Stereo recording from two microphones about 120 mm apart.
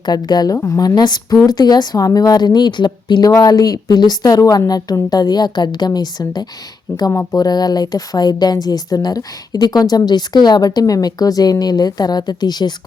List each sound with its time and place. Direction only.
0.0 s a woman's voice: 35° left (ahead or behind)